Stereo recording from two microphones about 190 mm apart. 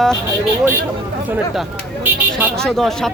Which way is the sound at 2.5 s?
5° left (ahead or behind).